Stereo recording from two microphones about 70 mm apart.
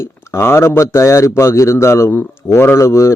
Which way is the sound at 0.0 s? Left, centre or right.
Left.